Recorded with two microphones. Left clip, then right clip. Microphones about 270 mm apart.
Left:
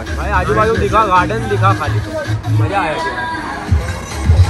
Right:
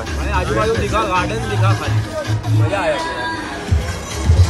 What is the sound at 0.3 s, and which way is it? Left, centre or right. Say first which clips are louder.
Speech: left 4 dB; centre.